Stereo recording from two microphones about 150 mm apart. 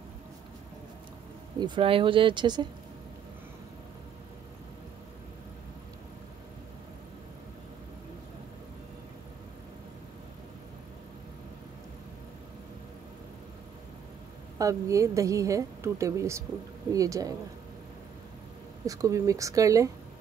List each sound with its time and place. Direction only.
1.6 s speech: 35° right (ahead or behind)
14.6 s a woman's voice: 20° right (ahead or behind)
18.9 s a woman's voice: 20° right (ahead or behind)